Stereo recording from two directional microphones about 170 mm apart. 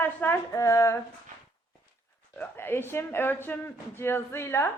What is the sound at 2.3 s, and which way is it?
A woman's voice, 10° left (ahead or behind).